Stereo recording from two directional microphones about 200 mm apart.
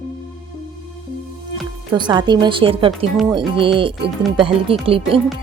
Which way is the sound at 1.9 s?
20° right (ahead or behind).